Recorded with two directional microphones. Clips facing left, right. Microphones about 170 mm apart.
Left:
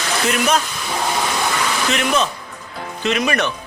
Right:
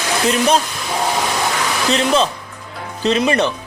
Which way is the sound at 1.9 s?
30° right (ahead or behind).